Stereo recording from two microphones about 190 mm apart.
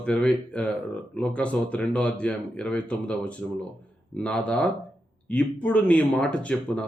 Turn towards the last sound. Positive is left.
turn(degrees=5)  # may be behind; listen again after turning